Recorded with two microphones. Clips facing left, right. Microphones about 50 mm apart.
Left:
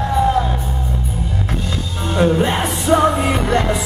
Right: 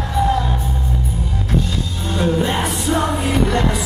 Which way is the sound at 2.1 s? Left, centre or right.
Left.